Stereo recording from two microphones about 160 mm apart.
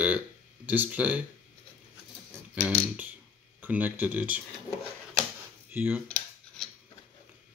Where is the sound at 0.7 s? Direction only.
10° right (ahead or behind).